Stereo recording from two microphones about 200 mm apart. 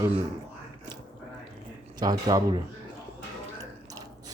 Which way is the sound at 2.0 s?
20° right (ahead or behind).